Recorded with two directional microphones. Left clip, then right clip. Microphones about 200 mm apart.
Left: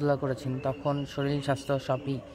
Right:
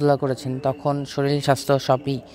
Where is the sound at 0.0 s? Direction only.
35° right (ahead or behind).